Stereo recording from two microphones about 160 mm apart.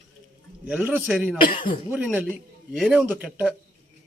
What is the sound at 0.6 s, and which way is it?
Speech, 10° right (ahead or behind).